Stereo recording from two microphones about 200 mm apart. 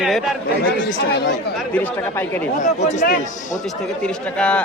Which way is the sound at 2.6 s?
35° left (ahead or behind).